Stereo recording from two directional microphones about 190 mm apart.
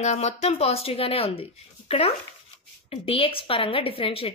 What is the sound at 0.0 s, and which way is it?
A woman's voice, 35° left (ahead or behind).